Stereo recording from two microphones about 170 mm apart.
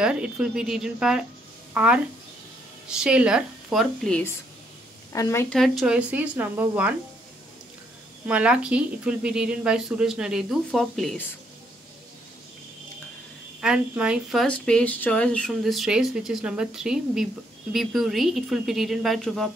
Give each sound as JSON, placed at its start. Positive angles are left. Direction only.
{"t": 0.0, "sound": "speech", "side_deg": -5}
{"t": 5.1, "sound": "a woman's voice", "side_deg": 20}
{"t": 5.5, "sound": "speech", "side_deg": 0}
{"t": 8.3, "sound": "speech", "side_deg": -5}
{"t": 13.6, "sound": "speech", "side_deg": -5}